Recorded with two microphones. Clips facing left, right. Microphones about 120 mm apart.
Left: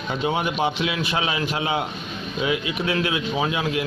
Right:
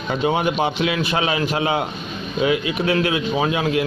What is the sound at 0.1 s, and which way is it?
Speech, 60° right (ahead or behind).